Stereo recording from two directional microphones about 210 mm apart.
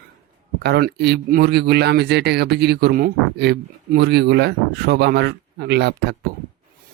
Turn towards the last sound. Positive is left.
turn(degrees=-55)  # may be behind; listen again after turning